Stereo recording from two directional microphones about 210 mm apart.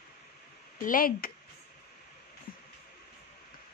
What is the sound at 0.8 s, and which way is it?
Speech, 40° left (ahead or behind).